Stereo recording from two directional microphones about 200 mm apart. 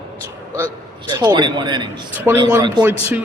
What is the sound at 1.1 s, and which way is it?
Speech, 20° right (ahead or behind).